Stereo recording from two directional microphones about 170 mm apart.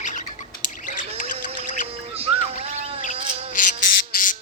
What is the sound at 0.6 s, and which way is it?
Squawk, 50° left (ahead or behind).